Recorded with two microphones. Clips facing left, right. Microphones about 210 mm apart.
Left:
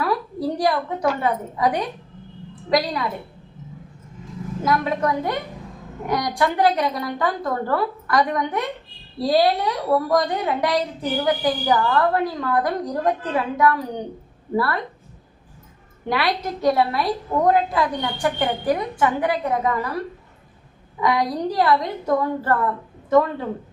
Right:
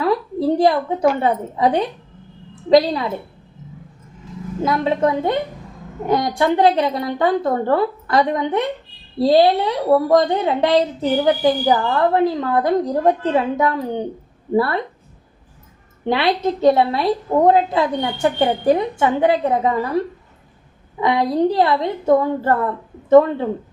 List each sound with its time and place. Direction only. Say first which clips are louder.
0.0 s a woman's voice: right 5 dB; 25° right (ahead or behind)
4.6 s a woman's voice: right 4 dB; 25° right (ahead or behind)
16.0 s a woman's voice: right 5 dB; 25° right (ahead or behind)
21.0 s a woman's voice: right 5 dB; 25° right (ahead or behind)